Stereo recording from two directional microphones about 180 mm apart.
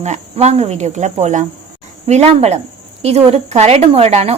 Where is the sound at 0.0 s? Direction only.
40° right (ahead or behind).